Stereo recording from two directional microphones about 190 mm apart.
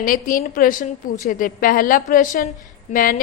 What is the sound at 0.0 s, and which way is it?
A woman's voice, 45° left (ahead or behind).